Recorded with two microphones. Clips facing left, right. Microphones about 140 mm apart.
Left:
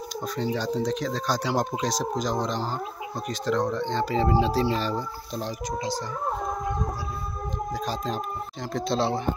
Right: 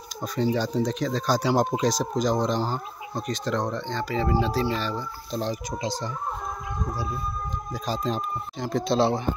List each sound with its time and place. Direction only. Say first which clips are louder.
0.4 s speech: right 3 dB; centre (ahead or behind)
3.8 s speech: left 3 dB; 25° left (ahead or behind)
5.3 s speech: right 5 dB; 5° left (ahead or behind)
7.8 s speech: right 6 dB; centre (ahead or behind)